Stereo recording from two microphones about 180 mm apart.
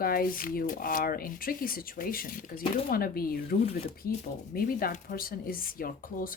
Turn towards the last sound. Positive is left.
turn(degrees=50)  # may be behind; listen again after turning